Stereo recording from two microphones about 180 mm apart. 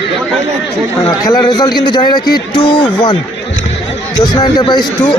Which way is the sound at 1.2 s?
20° left (ahead or behind).